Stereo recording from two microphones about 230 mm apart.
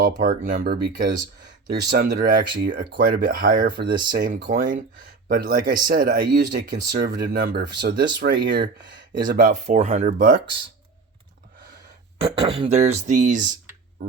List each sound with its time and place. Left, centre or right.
0.0 s speech: right
1.2 s speech: centre
1.9 s speech: right
4.4 s speech: right
12.2 s speech: right